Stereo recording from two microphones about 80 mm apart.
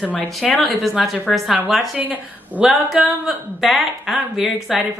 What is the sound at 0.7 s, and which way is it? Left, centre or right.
Speech, centre.